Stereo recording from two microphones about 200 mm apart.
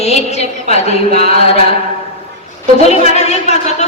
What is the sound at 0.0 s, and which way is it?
Speech, 30° left (ahead or behind).